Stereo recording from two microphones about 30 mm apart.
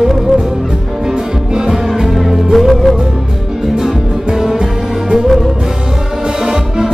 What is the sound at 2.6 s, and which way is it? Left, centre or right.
Music, centre.